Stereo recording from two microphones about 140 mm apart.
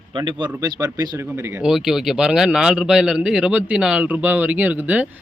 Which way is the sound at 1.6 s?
Centre (ahead or behind).